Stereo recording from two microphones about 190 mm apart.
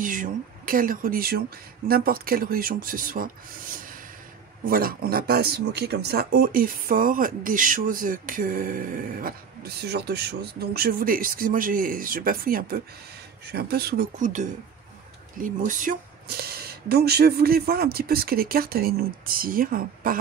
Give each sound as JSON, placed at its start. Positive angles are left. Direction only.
{"t": 0.0, "sound": "speech", "side_deg": -45}
{"t": 3.7, "sound": "snort", "side_deg": -45}
{"t": 4.6, "sound": "speech", "side_deg": -50}